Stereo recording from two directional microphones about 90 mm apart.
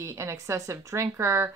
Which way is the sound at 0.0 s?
35° right (ahead or behind).